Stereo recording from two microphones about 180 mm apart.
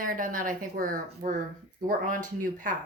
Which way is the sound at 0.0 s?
50° right (ahead or behind).